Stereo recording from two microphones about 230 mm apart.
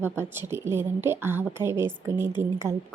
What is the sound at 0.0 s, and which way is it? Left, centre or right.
A woman's voice, centre.